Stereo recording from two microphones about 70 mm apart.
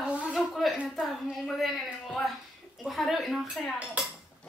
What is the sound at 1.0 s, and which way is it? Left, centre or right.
A woman's voice, centre.